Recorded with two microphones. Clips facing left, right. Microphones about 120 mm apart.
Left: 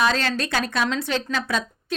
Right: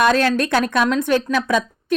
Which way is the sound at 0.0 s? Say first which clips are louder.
Right 6 dB; 55° right (ahead or behind).